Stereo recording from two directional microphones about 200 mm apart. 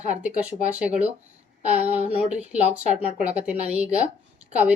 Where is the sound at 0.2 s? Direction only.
5° right (ahead or behind).